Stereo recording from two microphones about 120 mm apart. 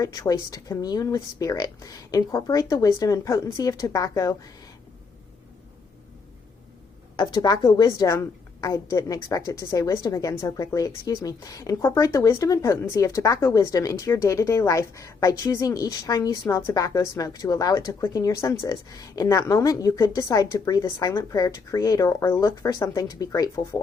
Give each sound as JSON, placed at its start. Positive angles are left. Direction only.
{"t": 0.0, "sound": "speech", "side_deg": 30}
{"t": 7.2, "sound": "a woman's voice", "side_deg": 35}